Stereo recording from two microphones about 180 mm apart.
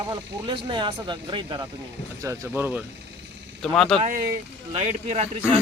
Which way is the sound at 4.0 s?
50° right (ahead or behind).